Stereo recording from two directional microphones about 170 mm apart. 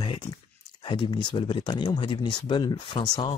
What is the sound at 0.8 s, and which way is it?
Speech, 30° left (ahead or behind).